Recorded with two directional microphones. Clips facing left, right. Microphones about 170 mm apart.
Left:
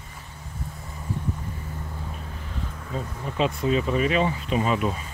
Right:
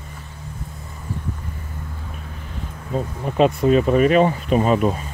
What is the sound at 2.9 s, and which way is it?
Speech, 55° right (ahead or behind).